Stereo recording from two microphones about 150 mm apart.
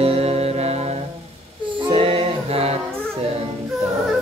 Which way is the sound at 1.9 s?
40° right (ahead or behind).